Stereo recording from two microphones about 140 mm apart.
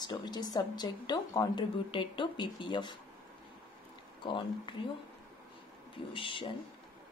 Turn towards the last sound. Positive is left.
turn(degrees=40)  # may be behind; listen again after turning